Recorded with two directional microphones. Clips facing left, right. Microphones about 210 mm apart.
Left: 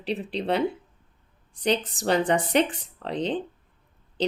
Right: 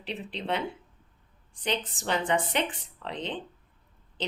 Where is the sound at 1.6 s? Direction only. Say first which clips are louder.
Left 7 dB; 40° left (ahead or behind).